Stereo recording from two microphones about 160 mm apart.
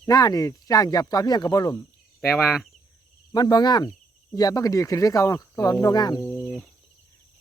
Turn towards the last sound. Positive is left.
turn(degrees=25)  # may be behind; listen again after turning